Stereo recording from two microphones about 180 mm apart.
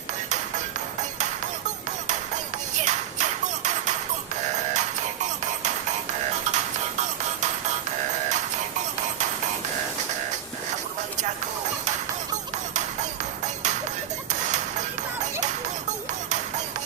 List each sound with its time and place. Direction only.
2.8 s music: 40° right (ahead or behind)
14.4 s music: 40° right (ahead or behind)